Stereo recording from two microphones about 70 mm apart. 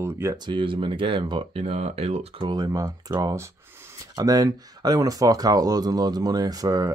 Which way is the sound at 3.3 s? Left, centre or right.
Right.